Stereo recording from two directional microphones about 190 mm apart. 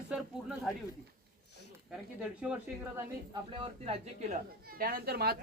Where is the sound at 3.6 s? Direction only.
30° right (ahead or behind); by 5.3 s 55° right (ahead or behind).